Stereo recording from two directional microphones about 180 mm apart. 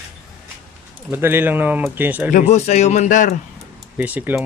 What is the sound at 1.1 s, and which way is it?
Speech, 10° right (ahead or behind).